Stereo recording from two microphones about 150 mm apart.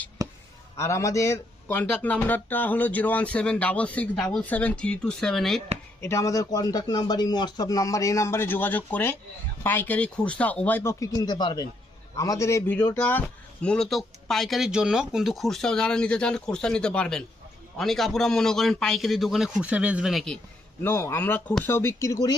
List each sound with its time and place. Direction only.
0.2 s a sound: 25° right (ahead or behind)
0.8 s speech: 20° left (ahead or behind); by 5.6 s centre (ahead or behind)
6.0 s speech: 20° left (ahead or behind)
11.1 s speech: 30° left (ahead or behind); by 20.4 s centre (ahead or behind)
20.8 s speech: 15° left (ahead or behind)